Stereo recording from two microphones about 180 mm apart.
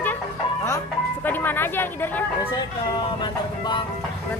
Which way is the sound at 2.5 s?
25° left (ahead or behind).